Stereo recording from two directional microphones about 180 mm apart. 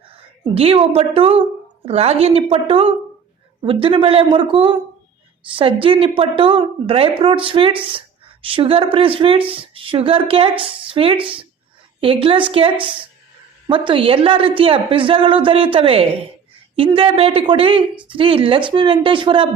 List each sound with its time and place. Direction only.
0.4 s a woman's voice: 30° right (ahead or behind)